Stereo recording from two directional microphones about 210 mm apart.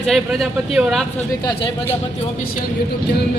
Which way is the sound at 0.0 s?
Centre (ahead or behind).